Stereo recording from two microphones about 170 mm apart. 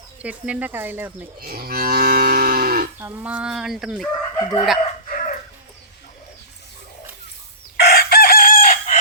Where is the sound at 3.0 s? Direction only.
15° right (ahead or behind).